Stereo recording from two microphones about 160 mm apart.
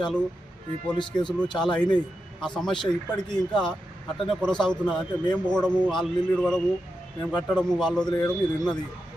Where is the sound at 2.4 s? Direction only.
Centre (ahead or behind).